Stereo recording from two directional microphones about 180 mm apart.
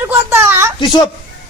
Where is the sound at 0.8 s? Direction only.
25° left (ahead or behind).